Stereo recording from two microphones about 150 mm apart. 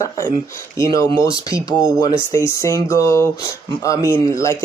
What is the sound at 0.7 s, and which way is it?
Speech, 20° left (ahead or behind).